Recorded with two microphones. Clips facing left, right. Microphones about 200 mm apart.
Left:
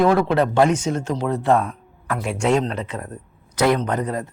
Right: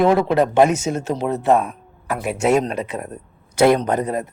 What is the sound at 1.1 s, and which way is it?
Speech, 20° right (ahead or behind).